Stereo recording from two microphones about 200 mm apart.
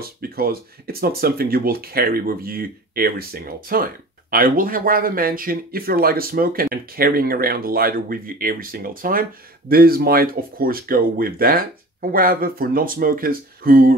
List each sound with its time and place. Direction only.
0.0 s speech: 50° right (ahead or behind)